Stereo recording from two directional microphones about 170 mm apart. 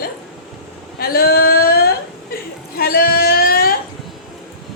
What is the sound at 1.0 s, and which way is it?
Speech, 65° left (ahead or behind).